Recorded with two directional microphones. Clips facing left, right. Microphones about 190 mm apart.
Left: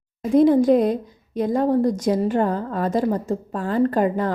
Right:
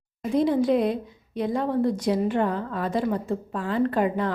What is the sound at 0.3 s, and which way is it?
A woman's voice, 45° left (ahead or behind).